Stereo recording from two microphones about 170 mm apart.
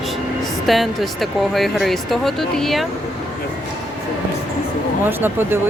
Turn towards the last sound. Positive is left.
turn(degrees=-10)  # may be behind; listen again after turning